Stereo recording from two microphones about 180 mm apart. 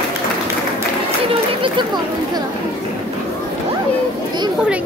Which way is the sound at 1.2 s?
30° right (ahead or behind).